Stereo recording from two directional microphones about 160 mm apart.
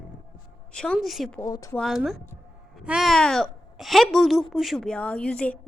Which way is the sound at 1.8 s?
Centre (ahead or behind).